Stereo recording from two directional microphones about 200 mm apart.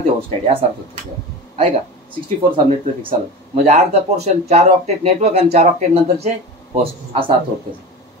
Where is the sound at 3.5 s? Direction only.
35° right (ahead or behind).